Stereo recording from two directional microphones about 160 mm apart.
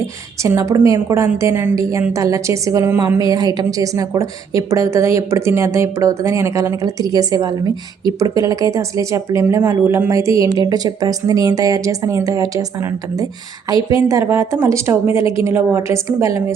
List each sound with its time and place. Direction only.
0.4 s a woman's voice: 20° right (ahead or behind)